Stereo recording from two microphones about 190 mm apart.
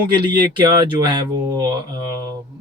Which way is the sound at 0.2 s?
25° right (ahead or behind).